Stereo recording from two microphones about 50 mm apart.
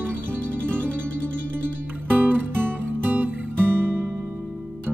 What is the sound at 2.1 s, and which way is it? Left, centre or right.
Music, right.